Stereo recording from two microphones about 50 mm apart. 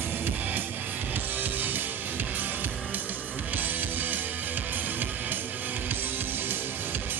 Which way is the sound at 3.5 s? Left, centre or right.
Right.